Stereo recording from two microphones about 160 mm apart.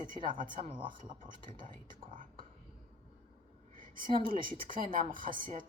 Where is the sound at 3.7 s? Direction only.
60° right (ahead or behind).